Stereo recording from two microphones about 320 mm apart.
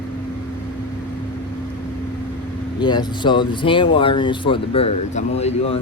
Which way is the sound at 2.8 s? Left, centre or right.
Centre.